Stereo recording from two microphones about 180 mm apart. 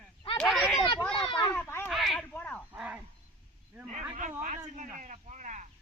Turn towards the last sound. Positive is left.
turn(degrees=-40)  # may be behind; listen again after turning